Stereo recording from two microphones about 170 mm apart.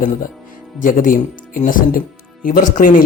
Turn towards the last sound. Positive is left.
turn(degrees=50)  # may be behind; listen again after turning